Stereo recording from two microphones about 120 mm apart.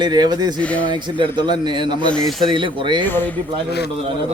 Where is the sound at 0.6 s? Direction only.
10° left (ahead or behind).